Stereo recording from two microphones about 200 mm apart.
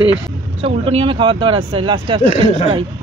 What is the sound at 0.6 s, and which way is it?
Speech, 30° right (ahead or behind).